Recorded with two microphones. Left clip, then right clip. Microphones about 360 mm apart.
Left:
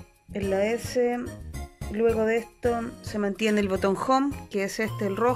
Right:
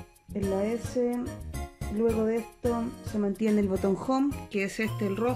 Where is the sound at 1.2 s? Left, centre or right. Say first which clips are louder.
Right 1 dB; centre.